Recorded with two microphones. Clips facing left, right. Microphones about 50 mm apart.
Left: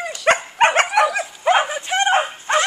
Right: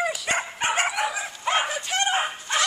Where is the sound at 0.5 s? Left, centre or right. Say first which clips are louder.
Left 10 dB; left.